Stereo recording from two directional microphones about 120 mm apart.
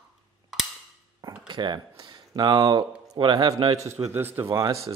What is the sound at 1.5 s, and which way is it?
Speech, 40° right (ahead or behind).